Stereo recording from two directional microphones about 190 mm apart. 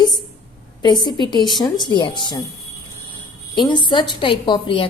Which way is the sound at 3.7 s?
25° left (ahead or behind).